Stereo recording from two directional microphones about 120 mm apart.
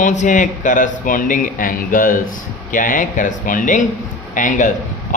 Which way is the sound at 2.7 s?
90° left.